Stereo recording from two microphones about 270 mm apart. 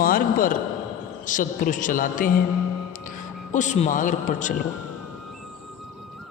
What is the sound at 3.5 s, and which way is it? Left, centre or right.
A man's voice, left.